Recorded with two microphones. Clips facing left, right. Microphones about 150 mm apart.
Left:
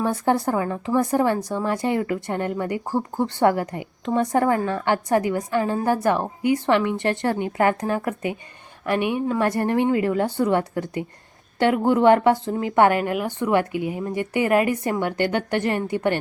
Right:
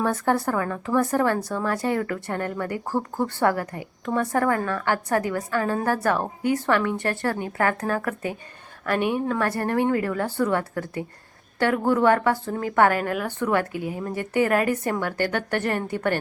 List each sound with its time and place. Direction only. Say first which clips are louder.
0.0 s a woman's voice: left 2 dB; 15° left (ahead or behind)